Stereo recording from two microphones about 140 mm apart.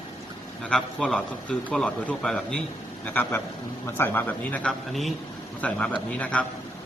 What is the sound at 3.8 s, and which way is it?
Speech, 15° left (ahead or behind).